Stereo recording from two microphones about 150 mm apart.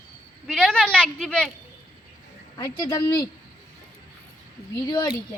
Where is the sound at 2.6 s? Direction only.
25° left (ahead or behind).